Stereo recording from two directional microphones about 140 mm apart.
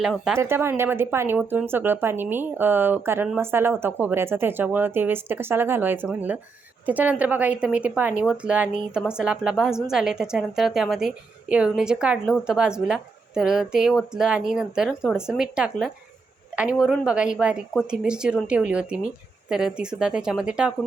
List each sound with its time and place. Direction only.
0.0 s speech: centre (ahead or behind)
0.3 s speech: 20° right (ahead or behind)